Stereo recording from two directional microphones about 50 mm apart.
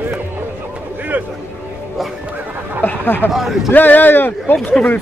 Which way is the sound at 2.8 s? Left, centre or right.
Left.